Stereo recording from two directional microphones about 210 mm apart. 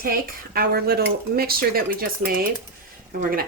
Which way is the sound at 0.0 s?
45° right (ahead or behind).